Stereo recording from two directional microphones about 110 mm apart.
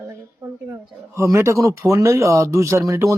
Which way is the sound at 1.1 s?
25° right (ahead or behind).